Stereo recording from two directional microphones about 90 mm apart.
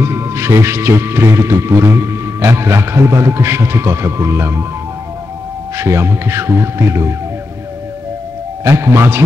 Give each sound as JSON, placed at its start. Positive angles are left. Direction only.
{"t": 0.0, "sound": "speech", "side_deg": -30}
{"t": 5.8, "sound": "speech", "side_deg": -30}
{"t": 8.6, "sound": "speech", "side_deg": -30}